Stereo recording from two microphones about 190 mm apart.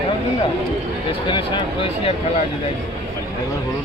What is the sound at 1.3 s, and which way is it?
Speech, 25° left (ahead or behind).